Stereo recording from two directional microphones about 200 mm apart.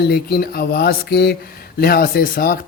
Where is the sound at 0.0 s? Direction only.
50° left (ahead or behind).